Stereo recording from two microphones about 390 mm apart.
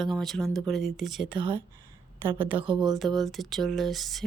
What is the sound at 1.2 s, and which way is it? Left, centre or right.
Speech, centre.